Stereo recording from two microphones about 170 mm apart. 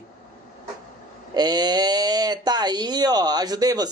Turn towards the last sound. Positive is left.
turn(degrees=-20)  # may be behind; listen again after turning